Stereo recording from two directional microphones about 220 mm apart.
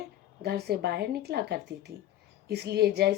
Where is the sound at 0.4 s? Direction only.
45° right (ahead or behind).